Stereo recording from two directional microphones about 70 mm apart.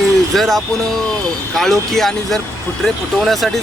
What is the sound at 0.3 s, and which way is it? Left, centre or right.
Speech, centre.